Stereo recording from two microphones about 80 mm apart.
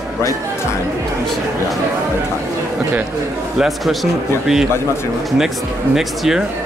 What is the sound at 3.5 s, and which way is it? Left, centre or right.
Speech, centre.